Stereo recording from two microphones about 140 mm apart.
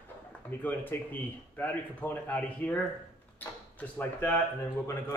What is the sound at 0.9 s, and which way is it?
Speech, 15° left (ahead or behind).